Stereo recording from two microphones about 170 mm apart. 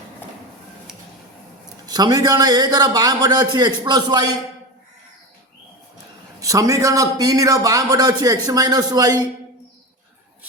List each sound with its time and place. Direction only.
1.9 s a man's voice: 25° right (ahead or behind)
6.4 s a man's voice: 20° right (ahead or behind)